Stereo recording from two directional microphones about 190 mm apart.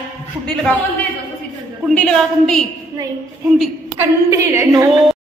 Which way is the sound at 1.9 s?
5° left (ahead or behind).